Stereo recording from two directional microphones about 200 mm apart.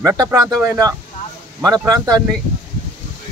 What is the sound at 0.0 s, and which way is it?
Speech, 15° right (ahead or behind).